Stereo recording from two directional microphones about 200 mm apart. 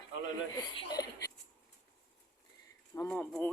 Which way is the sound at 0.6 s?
20° left (ahead or behind).